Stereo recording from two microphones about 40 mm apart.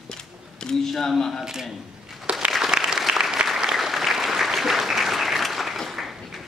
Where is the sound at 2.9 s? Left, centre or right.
Centre.